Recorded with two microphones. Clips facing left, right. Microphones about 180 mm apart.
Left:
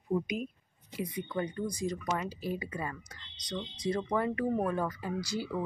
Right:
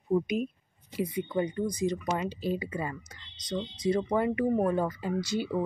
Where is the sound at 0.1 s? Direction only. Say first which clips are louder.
Right 5 dB; 25° right (ahead or behind).